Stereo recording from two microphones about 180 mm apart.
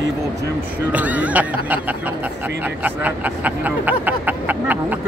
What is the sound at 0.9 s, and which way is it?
Speech, 10° right (ahead or behind).